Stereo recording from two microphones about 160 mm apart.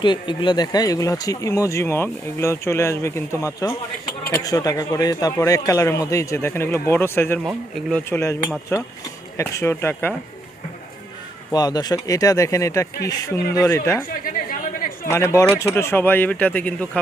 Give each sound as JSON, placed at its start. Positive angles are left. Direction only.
{"t": 0.0, "sound": "speech", "side_deg": 30}
{"t": 7.4, "sound": "speech", "side_deg": 5}
{"t": 8.1, "sound": "speech", "side_deg": 20}
{"t": 11.5, "sound": "speech", "side_deg": 25}
{"t": 14.1, "sound": "chatter", "side_deg": 60}
{"t": 15.0, "sound": "speech", "side_deg": 15}